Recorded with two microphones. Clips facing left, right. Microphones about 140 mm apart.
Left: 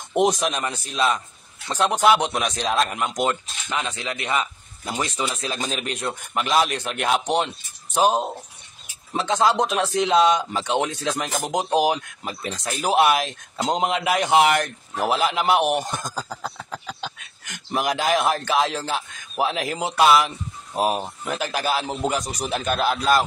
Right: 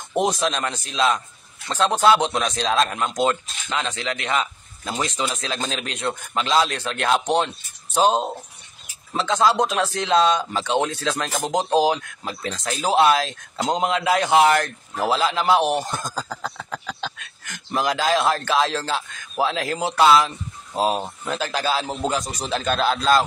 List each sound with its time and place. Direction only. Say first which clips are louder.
0.1 s speech: left 1 dB; 20° left (ahead or behind)
9.1 s a man's voice: right 1 dB; 20° left (ahead or behind)
17.7 s speech: right 1 dB; 20° left (ahead or behind)